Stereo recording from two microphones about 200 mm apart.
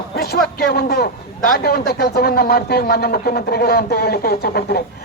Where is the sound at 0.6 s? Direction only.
50° left (ahead or behind).